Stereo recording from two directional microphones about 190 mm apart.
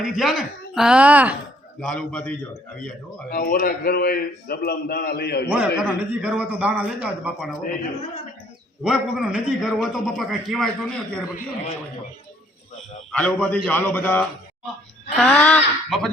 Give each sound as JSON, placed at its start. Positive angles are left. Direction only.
{"t": 0.0, "sound": "a man's voice", "side_deg": 0}
{"t": 1.8, "sound": "a man's voice", "side_deg": 5}
{"t": 3.2, "sound": "a man's voice", "side_deg": 45}
{"t": 5.5, "sound": "a man's voice", "side_deg": -5}
{"t": 8.8, "sound": "a man's voice", "side_deg": -5}
{"t": 13.1, "sound": "a man's voice", "side_deg": 5}